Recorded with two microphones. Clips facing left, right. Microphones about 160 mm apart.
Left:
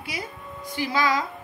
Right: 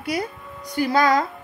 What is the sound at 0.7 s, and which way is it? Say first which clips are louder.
Speech: right 6 dB; 45° right (ahead or behind).